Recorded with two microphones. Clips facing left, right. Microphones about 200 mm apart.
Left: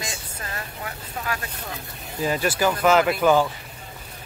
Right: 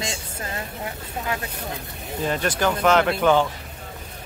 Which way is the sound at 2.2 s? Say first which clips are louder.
Left 1 dB; 5° left (ahead or behind).